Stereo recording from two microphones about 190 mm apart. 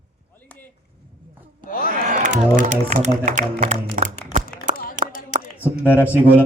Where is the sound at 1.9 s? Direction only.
45° right (ahead or behind).